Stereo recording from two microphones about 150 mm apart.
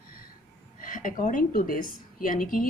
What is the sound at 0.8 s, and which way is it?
Speech, 65° left (ahead or behind).